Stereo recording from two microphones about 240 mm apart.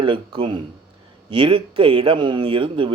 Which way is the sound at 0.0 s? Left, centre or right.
Right.